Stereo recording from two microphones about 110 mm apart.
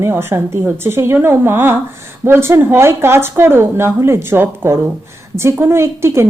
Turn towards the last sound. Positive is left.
turn(degrees=-25)  # may be behind; listen again after turning